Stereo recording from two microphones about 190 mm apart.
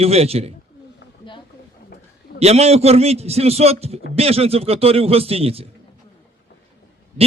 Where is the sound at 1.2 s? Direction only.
25° left (ahead or behind).